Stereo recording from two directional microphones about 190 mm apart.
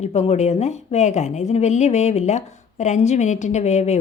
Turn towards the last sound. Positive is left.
turn(degrees=35)  # may be behind; listen again after turning